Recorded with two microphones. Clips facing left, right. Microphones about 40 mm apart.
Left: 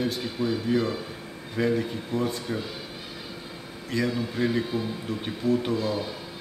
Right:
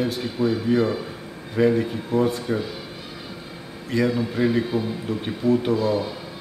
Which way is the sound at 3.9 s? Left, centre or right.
Centre.